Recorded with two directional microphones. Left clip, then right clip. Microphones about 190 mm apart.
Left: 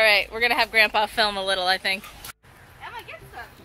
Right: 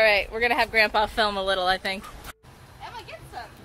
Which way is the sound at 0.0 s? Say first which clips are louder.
Left 1 dB; 5° right (ahead or behind).